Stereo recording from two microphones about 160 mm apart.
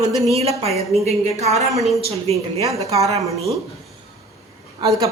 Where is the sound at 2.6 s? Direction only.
20° right (ahead or behind).